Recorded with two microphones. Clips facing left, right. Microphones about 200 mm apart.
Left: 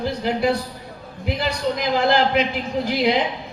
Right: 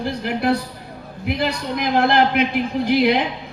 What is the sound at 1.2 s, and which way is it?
Speech, 60° right (ahead or behind).